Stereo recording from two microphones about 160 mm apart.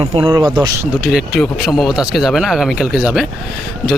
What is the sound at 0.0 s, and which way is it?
Speech, 35° right (ahead or behind).